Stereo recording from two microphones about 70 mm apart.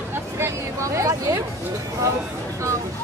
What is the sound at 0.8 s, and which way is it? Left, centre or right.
Speech, right.